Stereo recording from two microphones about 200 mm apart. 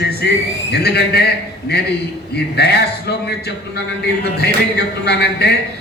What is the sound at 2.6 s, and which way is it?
Speech, 55° left (ahead or behind).